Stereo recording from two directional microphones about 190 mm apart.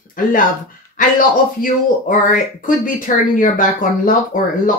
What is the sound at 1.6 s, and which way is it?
Speech, 45° left (ahead or behind).